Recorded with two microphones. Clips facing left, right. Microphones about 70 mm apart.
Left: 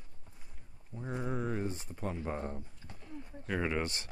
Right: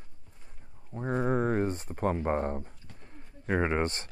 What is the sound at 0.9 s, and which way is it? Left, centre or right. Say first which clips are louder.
Speech: right 9 dB; right.